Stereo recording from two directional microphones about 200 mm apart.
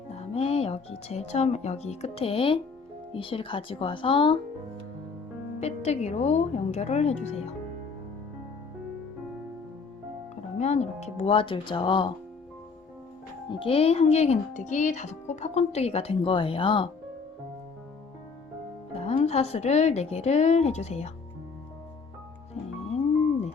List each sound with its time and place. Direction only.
0.2 s speech: 30° left (ahead or behind)
5.5 s speech: 35° left (ahead or behind)
10.6 s speech: 35° left (ahead or behind)
13.6 s speech: 30° left (ahead or behind)
18.9 s speech: 30° left (ahead or behind)